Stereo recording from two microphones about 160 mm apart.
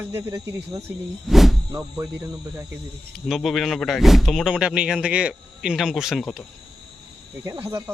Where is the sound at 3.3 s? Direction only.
Centre (ahead or behind).